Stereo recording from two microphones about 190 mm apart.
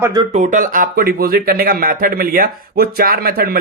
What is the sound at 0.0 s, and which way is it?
Speech, 20° right (ahead or behind).